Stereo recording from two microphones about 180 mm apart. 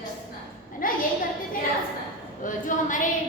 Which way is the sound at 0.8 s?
50° left (ahead or behind).